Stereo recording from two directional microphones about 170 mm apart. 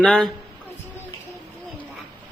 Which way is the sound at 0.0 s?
Centre (ahead or behind).